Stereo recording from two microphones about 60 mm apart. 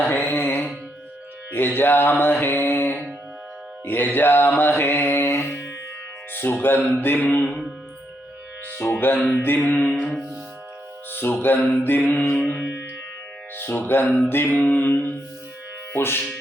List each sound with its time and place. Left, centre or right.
0.0 s music: left
1.5 s mantra: left
5.2 s music: left
6.3 s speech: left
7.0 s mantra: left
8.8 s mantra: left
9.4 s mantra: left
9.9 s music: centre
11.1 s music: left
11.8 s mantra: left
13.6 s mantra: left